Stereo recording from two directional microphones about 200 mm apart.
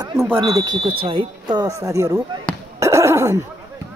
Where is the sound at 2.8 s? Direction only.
15° right (ahead or behind).